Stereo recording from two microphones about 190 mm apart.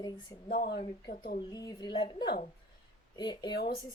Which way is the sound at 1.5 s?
20° left (ahead or behind).